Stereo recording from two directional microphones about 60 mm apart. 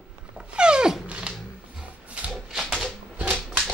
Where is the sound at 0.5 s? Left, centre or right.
Centre.